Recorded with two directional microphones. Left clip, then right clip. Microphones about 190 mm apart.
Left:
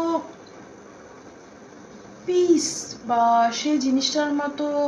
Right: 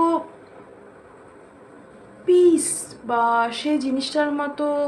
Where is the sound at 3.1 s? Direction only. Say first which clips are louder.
Left 1 dB; 30° right (ahead or behind).